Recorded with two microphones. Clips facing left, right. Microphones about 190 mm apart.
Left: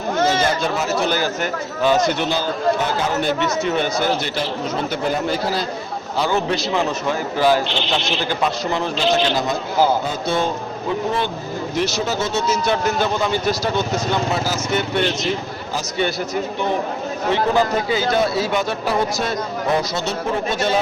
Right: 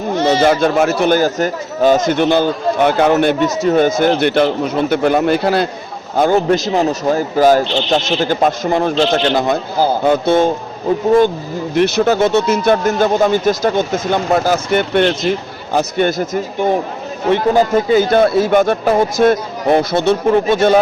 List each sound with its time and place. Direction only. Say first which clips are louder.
0.4 s speech: right 8 dB; 55° right (ahead or behind)
3.4 s speech: right 7 dB; 40° right (ahead or behind); by 5.6 s 60° right (ahead or behind)
6.1 s speech: right 8 dB; 50° right (ahead or behind)
11.7 s speech: right 10 dB; 60° right (ahead or behind)